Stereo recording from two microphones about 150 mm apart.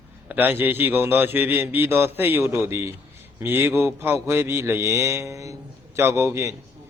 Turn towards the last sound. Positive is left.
turn(degrees=-20)  # may be behind; listen again after turning